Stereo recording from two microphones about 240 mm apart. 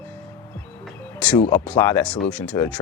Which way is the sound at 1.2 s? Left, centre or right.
Centre.